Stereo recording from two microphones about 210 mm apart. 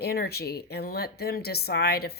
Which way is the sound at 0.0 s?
50° left (ahead or behind).